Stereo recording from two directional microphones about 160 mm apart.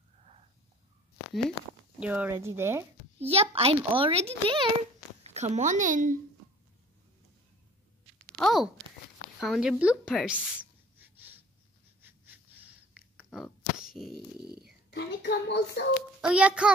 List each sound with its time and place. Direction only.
2.0 s a child's voice: 10° right (ahead or behind)
3.2 s a child's voice: 40° right (ahead or behind)
5.3 s a child's voice: 45° right (ahead or behind)
8.4 s a sound: centre (ahead or behind)
9.4 s speech: centre (ahead or behind)
12.0 s a sound: 10° right (ahead or behind)
14.9 s speech: 90° left
16.2 s a child's voice: 5° right (ahead or behind)